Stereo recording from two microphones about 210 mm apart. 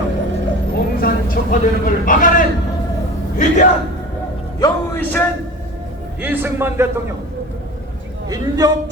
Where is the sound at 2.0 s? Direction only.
40° left (ahead or behind).